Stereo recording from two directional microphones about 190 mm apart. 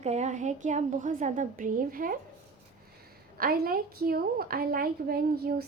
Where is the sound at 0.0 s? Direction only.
35° right (ahead or behind).